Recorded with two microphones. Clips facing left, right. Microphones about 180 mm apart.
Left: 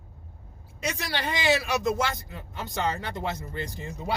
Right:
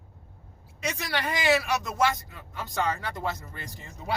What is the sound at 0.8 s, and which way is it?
Speech, 30° left (ahead or behind).